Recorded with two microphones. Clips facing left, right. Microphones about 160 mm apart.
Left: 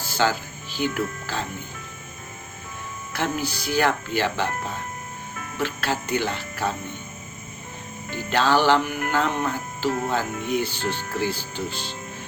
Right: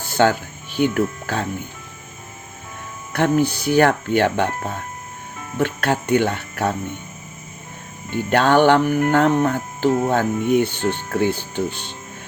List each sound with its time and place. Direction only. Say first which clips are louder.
0.1 s speech: right 6 dB; 60° right (ahead or behind)
3.1 s speech: right 9 dB; 55° right (ahead or behind)
8.1 s speech: right 5 dB; 60° right (ahead or behind)